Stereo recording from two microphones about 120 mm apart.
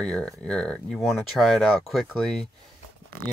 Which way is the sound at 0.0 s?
5° left (ahead or behind).